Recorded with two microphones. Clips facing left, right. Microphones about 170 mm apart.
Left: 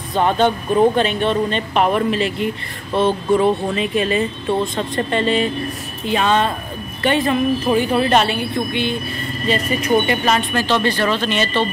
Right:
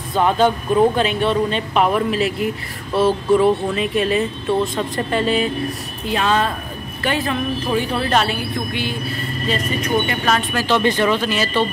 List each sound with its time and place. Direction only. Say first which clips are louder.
0.1 s speech: even; 5° right (ahead or behind)